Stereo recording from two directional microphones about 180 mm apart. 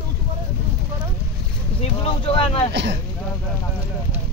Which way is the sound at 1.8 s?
30° left (ahead or behind).